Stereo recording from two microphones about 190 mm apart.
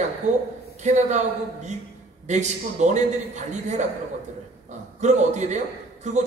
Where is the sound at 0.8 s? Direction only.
40° right (ahead or behind).